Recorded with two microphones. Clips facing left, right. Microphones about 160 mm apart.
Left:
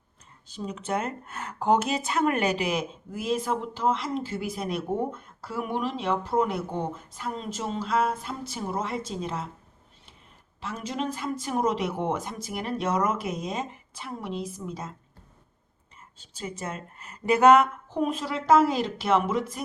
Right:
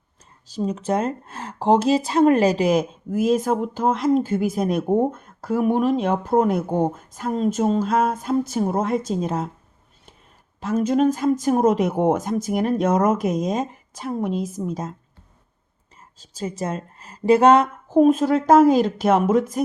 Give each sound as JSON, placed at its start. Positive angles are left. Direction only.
{"t": 0.5, "sound": "speech", "side_deg": -40}
{"t": 10.6, "sound": "speech", "side_deg": -45}
{"t": 16.0, "sound": "a woman's voice", "side_deg": -40}
{"t": 17.8, "sound": "speech", "side_deg": -45}